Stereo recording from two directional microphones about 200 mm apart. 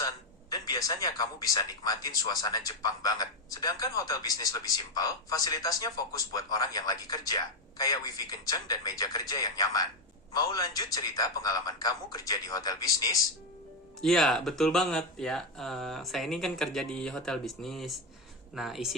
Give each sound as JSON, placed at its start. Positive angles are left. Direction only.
{"t": 0.5, "sound": "speech", "side_deg": 20}
{"t": 14.0, "sound": "speech", "side_deg": 0}